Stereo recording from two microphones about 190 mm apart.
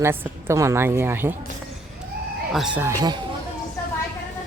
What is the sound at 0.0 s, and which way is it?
A woman's voice, 10° right (ahead or behind).